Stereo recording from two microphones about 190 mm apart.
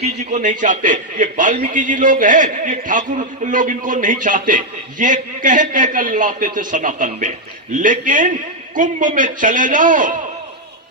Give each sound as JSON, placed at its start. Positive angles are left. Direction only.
{"t": 0.0, "sound": "a man's voice", "side_deg": -40}